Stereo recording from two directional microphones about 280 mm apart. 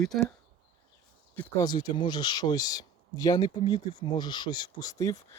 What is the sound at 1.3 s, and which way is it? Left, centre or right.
Speech, centre.